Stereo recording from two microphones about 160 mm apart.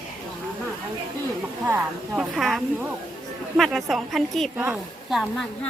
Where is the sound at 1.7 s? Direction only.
5° right (ahead or behind).